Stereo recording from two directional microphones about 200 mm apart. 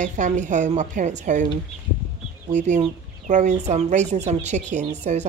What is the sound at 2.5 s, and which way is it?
Speech, 35° right (ahead or behind).